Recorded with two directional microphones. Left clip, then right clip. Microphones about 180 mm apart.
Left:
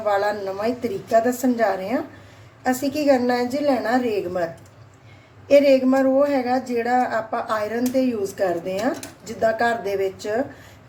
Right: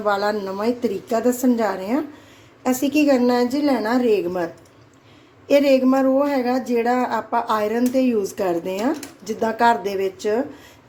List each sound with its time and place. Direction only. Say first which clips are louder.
0.0 s a woman's voice: even; 30° right (ahead or behind)
5.5 s a woman's voice: left 1 dB; 40° right (ahead or behind)